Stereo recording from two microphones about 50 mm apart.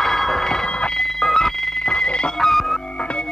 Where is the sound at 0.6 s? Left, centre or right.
Centre.